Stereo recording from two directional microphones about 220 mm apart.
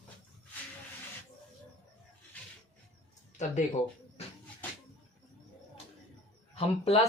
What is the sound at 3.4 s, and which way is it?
Speech, 35° left (ahead or behind).